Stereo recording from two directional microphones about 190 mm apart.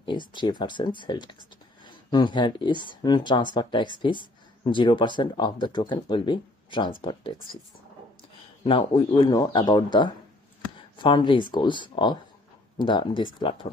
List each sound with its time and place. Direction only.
0.0 s speech: 25° left (ahead or behind)
8.6 s speech: 25° left (ahead or behind)